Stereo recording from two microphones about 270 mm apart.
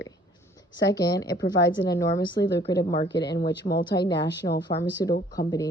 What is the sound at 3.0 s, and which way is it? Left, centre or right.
Speech, left.